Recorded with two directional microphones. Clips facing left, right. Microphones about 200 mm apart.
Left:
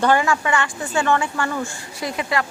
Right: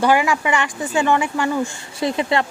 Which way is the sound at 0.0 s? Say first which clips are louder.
Right 1 dB; 10° right (ahead or behind).